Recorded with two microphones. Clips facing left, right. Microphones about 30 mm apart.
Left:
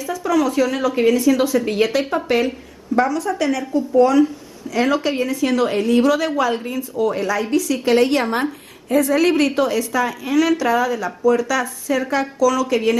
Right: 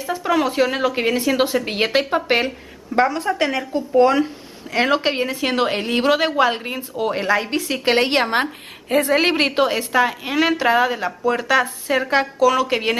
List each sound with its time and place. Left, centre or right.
0.0 s a woman's voice: right